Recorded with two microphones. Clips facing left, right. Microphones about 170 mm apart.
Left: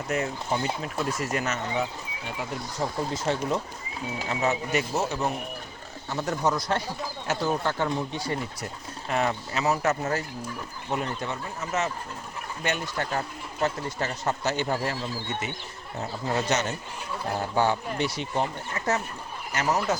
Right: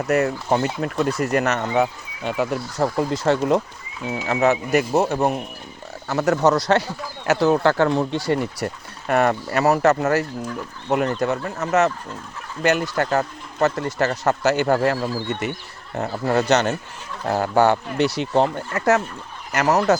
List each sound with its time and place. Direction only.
0.1 s speech: 70° right (ahead or behind)
6.1 s speech: 75° right (ahead or behind)
10.8 s speech: 85° right